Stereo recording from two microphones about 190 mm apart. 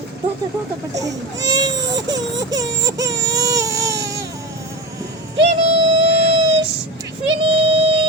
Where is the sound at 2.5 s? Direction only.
20° right (ahead or behind).